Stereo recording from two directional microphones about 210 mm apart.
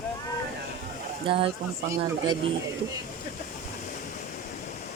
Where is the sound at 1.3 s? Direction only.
25° right (ahead or behind).